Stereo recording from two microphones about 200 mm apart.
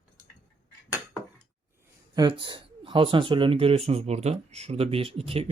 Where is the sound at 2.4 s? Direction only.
25° right (ahead or behind).